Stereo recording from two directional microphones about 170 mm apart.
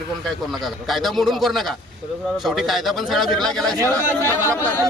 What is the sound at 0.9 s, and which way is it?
A man's voice, centre (ahead or behind).